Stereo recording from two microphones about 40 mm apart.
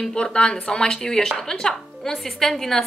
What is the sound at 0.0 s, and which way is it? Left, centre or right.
A woman's voice, left.